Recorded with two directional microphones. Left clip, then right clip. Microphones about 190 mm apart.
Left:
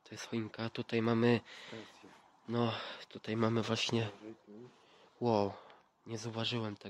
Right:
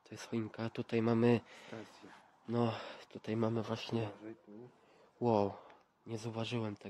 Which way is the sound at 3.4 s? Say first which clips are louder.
Left 5 dB; 20° left (ahead or behind).